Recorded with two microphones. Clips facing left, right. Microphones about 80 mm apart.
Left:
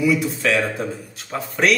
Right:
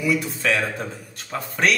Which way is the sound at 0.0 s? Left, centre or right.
Centre.